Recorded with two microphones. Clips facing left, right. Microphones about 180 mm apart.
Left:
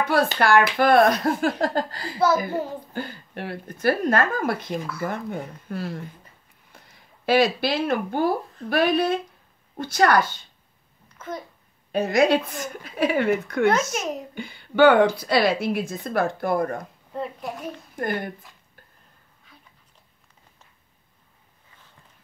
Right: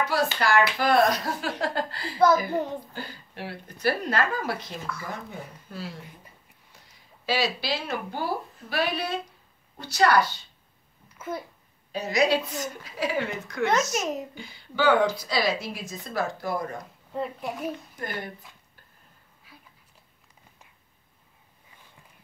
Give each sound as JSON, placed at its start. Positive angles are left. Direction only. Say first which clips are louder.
{"t": 0.0, "sound": "speech", "louder": "left 4 dB", "side_deg": 55}
{"t": 2.1, "sound": "a child's voice", "louder": "even", "side_deg": 5}
{"t": 2.9, "sound": "a woman's voice", "louder": "left 6 dB", "side_deg": 55}
{"t": 7.2, "sound": "speech", "louder": "left 7 dB", "side_deg": 55}
{"t": 11.1, "sound": "babbling", "louder": "even", "side_deg": -10}
{"t": 11.9, "sound": "a woman's voice", "louder": "left 5 dB", "side_deg": 50}
{"t": 13.9, "sound": "a child's voice", "louder": "even", "side_deg": 0}
{"t": 14.3, "sound": "a woman's voice", "louder": "left 8 dB", "side_deg": 60}
{"t": 17.1, "sound": "a child's voice", "louder": "even", "side_deg": 0}
{"t": 17.9, "sound": "speech", "louder": "left 7 dB", "side_deg": 50}
{"t": 19.5, "sound": "a sound", "louder": "right 1 dB", "side_deg": -5}